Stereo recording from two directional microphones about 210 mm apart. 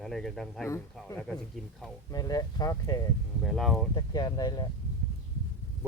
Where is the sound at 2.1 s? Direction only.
15° left (ahead or behind).